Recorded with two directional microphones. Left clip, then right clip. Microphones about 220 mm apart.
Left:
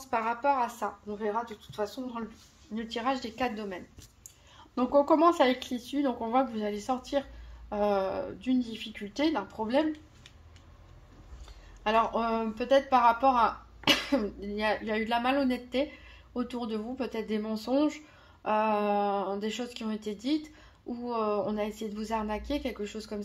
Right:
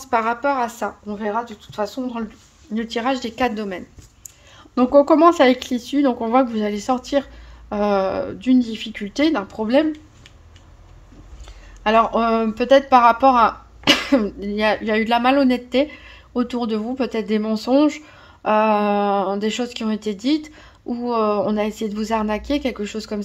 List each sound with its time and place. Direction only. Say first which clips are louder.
0.0 s a woman's voice: right 9 dB; 35° right (ahead or behind)
11.8 s speech: right 10 dB; 45° right (ahead or behind)